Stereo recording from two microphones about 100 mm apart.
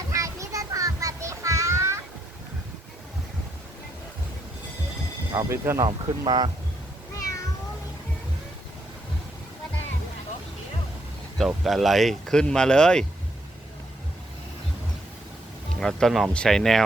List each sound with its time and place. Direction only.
0.1 s a sound: 30° right (ahead or behind)
5.3 s speech: 30° right (ahead or behind); by 6.5 s 45° right (ahead or behind)
11.3 s speech: centre (ahead or behind)
15.8 s speech: 5° left (ahead or behind)